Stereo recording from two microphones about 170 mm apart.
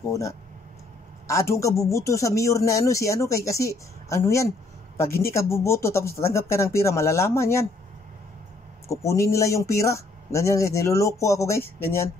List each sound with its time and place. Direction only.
0.1 s speech: 20° left (ahead or behind)
8.8 s speech: 20° left (ahead or behind)